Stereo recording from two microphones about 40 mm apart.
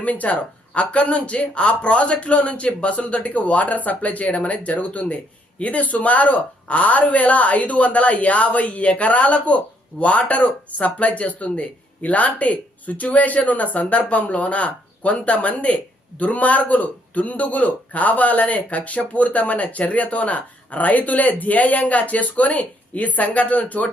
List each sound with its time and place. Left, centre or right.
0.0 s speech: left